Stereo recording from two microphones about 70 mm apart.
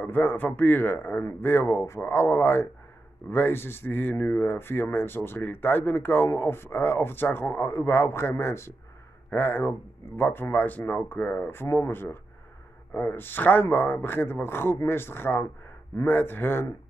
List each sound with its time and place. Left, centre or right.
0.0 s a man's voice: left